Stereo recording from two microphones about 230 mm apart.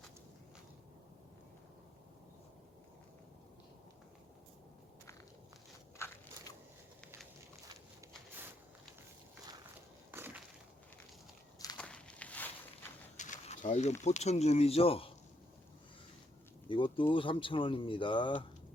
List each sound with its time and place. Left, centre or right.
10.1 s crushing: centre
11.8 s walk: centre
13.1 s a sound: left
14.0 s speech: left
16.6 s speech: left